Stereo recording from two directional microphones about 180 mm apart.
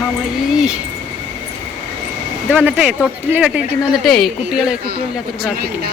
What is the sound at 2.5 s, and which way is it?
Speech, 5° right (ahead or behind).